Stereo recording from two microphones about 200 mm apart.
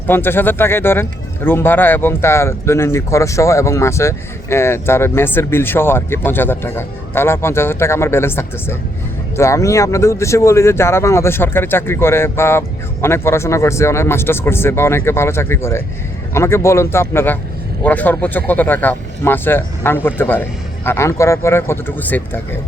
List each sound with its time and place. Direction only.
0.1 s speech: 10° left (ahead or behind)